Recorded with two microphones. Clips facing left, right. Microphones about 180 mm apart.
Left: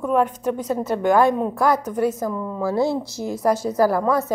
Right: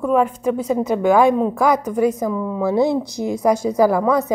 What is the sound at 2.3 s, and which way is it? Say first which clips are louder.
Speech: right 4 dB; centre (ahead or behind).